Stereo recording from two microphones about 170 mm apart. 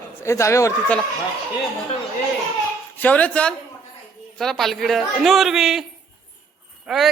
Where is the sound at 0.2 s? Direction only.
15° left (ahead or behind).